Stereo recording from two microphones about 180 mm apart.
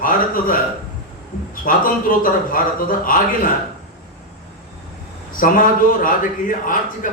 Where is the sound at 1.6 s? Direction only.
50° left (ahead or behind).